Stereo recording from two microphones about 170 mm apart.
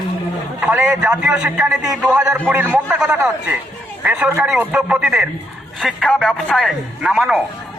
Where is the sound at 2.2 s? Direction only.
15° right (ahead or behind).